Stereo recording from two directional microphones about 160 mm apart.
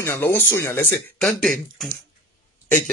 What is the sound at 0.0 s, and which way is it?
Speech, 15° left (ahead or behind).